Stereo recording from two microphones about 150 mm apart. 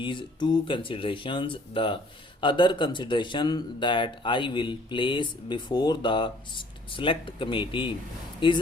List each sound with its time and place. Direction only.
0.0 s speech: 30° left (ahead or behind)